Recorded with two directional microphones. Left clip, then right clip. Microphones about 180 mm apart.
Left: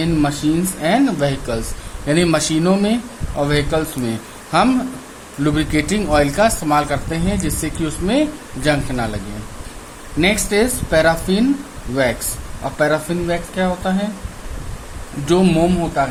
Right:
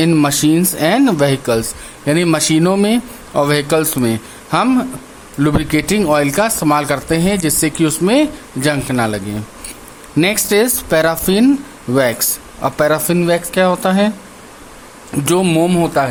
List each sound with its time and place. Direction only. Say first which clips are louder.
0.0 s speech: right 5 dB; 45° right (ahead or behind)
4.0 s speech: right 6 dB; 35° right (ahead or behind)
12.6 s speech: right 4 dB; 45° right (ahead or behind)
15.3 s speech: right 2 dB; 50° right (ahead or behind)